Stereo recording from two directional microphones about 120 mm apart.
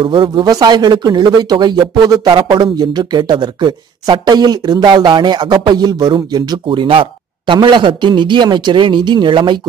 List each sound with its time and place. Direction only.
0.0 s speech: 45° right (ahead or behind)
0.4 s speech: 30° right (ahead or behind)